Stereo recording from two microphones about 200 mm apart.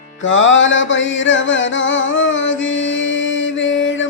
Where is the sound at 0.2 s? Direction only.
70° left (ahead or behind).